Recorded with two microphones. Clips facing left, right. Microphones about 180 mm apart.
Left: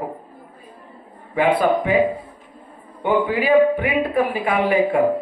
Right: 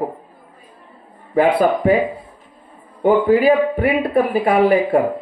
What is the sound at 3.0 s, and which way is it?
A man's voice, 40° right (ahead or behind).